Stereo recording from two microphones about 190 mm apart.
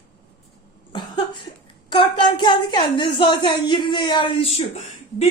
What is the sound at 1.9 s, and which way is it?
A woman's voice, 25° left (ahead or behind).